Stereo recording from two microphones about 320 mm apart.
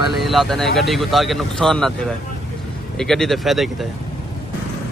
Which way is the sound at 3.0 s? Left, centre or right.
Centre.